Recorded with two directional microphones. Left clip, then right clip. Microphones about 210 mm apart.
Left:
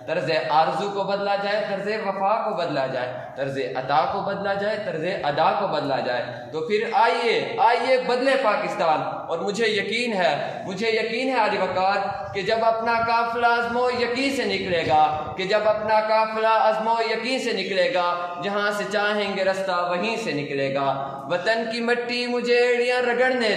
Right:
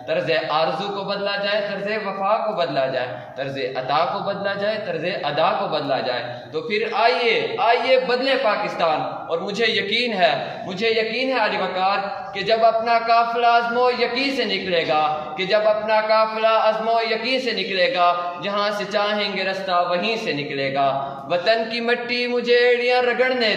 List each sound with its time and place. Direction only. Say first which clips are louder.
0.1 s a man's voice: right 1 dB; 15° left (ahead or behind)
6.7 s a man's voice: right 1 dB; 15° left (ahead or behind)
9.6 s a man's voice: right 4 dB; 15° left (ahead or behind)
15.5 s a man's voice: right 2 dB; 15° left (ahead or behind)
20.7 s a man's voice: right 3 dB; 15° left (ahead or behind)